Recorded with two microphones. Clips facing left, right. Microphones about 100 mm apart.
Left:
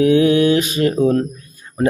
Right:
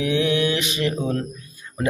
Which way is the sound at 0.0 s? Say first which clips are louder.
Left 8 dB; 40° left (ahead or behind).